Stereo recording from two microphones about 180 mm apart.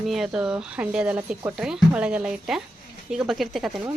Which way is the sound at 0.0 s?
Centre (ahead or behind).